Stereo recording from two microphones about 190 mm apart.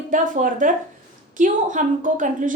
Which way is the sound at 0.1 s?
45° right (ahead or behind).